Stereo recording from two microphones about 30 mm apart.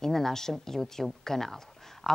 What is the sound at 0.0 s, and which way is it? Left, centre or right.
Speech, centre.